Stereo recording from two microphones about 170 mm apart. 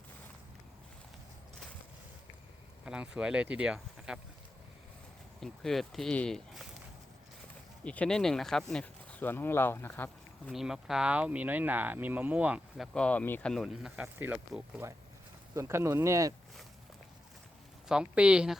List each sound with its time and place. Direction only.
2.8 s speech: 5° right (ahead or behind)
5.4 s speech: centre (ahead or behind)
7.9 s speech: 5° left (ahead or behind)
10.5 s speech: centre (ahead or behind)
17.8 s speech: 5° right (ahead or behind)